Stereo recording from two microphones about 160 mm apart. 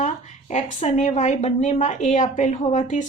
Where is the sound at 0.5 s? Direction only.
45° left (ahead or behind).